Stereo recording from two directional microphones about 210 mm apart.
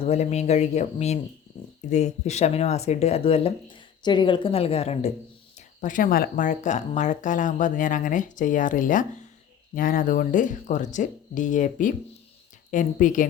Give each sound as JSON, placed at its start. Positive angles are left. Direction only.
{"t": 0.0, "sound": "speech", "side_deg": 30}